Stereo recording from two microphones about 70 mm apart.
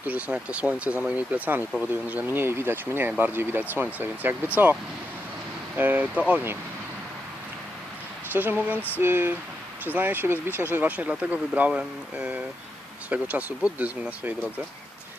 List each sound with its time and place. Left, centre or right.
0.0 s speech: right
8.3 s speech: right